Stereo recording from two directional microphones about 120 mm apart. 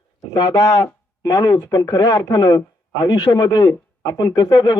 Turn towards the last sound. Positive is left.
turn(degrees=35)  # may be behind; listen again after turning